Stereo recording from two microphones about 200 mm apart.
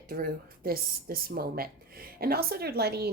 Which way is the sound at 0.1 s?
45° right (ahead or behind).